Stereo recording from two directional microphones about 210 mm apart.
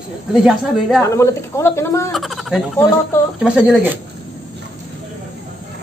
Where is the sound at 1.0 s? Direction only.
15° left (ahead or behind).